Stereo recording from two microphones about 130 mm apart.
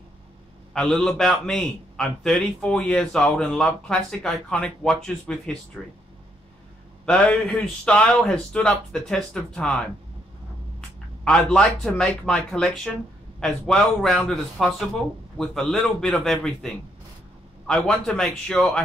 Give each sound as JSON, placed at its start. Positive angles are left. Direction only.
{"t": 0.7, "sound": "a man's voice", "side_deg": 5}
{"t": 7.1, "sound": "a man's voice", "side_deg": 5}
{"t": 11.2, "sound": "a man's voice", "side_deg": 5}
{"t": 17.6, "sound": "a man's voice", "side_deg": 5}